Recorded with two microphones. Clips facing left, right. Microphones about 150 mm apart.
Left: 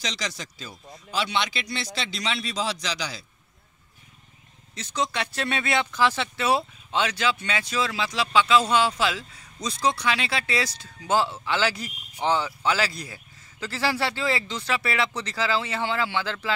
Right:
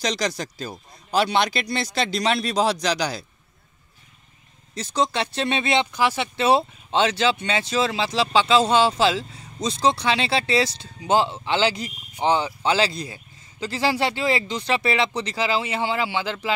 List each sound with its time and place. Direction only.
0.0 s speech: 40° right (ahead or behind)
4.7 s speech: 35° right (ahead or behind); by 6.3 s 15° right (ahead or behind)
6.3 s speech: 25° right (ahead or behind)